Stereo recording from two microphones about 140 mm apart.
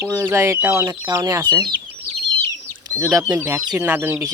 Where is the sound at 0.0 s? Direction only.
20° right (ahead or behind).